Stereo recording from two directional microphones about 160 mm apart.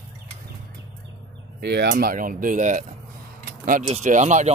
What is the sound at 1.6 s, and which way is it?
Speech, 90° right.